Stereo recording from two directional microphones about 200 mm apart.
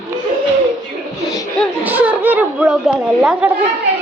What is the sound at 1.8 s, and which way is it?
Speech, 10° right (ahead or behind).